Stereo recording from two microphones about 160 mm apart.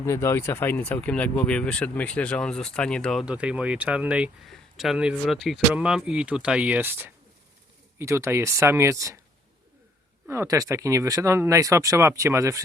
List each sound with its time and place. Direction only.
0.0 s speech: 20° left (ahead or behind); by 9.1 s 20° right (ahead or behind)
10.2 s speech: 20° right (ahead or behind)